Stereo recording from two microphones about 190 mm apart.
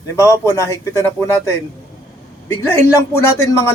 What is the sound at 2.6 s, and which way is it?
Speech, 10° left (ahead or behind).